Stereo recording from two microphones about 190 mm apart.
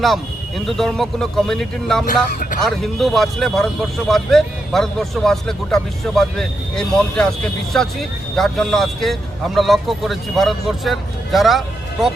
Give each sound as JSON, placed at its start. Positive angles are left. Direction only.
{"t": 0.6, "sound": "speech", "side_deg": 0}
{"t": 2.0, "sound": "speech", "side_deg": 45}
{"t": 2.6, "sound": "speech", "side_deg": 0}